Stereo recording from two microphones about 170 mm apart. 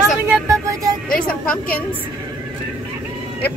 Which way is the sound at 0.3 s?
15° right (ahead or behind).